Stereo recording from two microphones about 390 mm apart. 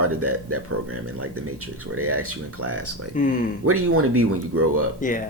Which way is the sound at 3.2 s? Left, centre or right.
Centre.